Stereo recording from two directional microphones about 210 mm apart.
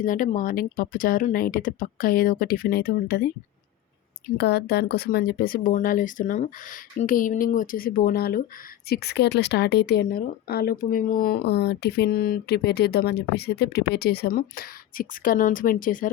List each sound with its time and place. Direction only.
0.0 s speech: 40° left (ahead or behind)
4.4 s speech: 50° left (ahead or behind)